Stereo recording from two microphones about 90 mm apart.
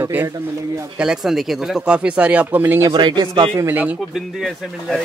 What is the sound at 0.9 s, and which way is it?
Speech, 10° right (ahead or behind).